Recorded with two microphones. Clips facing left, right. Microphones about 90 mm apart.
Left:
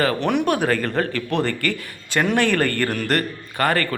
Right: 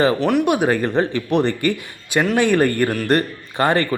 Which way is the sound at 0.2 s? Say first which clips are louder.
Right 3 dB; 5° right (ahead or behind).